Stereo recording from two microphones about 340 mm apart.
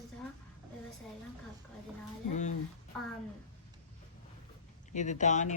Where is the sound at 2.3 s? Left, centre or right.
Left.